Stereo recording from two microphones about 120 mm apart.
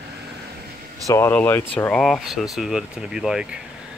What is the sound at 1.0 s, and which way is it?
Speech, 20° left (ahead or behind).